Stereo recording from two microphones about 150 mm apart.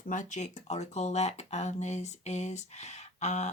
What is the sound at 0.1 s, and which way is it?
Speech, 55° left (ahead or behind).